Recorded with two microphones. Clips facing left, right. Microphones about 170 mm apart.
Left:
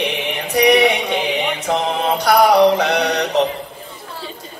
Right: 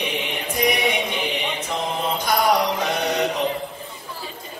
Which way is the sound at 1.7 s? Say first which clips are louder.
Left 7 dB; 75° left (ahead or behind).